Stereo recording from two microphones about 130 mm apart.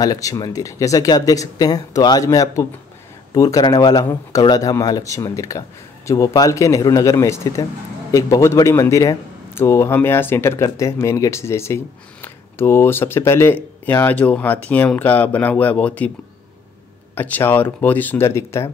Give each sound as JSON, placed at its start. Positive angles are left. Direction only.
{"t": 0.0, "sound": "speech", "side_deg": 30}
{"t": 17.1, "sound": "speech", "side_deg": 15}